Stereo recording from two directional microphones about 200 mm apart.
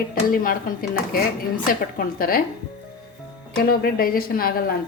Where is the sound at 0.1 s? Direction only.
45° left (ahead or behind).